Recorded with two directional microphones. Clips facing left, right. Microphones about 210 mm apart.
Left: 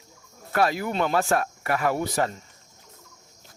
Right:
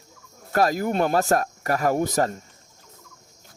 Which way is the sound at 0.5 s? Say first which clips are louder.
Right 3 dB; 40° right (ahead or behind).